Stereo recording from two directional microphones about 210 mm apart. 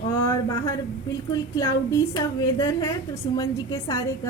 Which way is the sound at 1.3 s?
20° left (ahead or behind).